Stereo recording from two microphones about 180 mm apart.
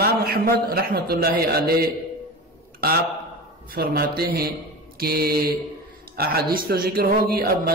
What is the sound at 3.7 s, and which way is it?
A man's voice, 60° right (ahead or behind).